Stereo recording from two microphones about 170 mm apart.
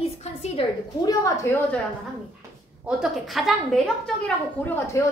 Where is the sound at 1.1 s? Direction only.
20° left (ahead or behind).